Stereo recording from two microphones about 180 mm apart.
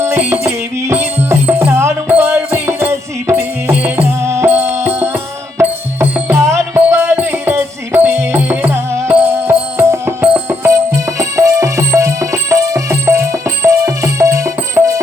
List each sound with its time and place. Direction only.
0.0 s music: 15° right (ahead or behind)